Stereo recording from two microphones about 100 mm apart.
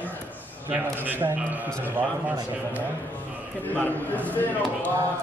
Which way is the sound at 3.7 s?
15° left (ahead or behind).